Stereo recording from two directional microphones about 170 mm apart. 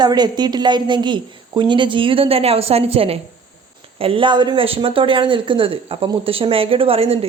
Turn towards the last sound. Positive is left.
turn(degrees=-35)  # may be behind; listen again after turning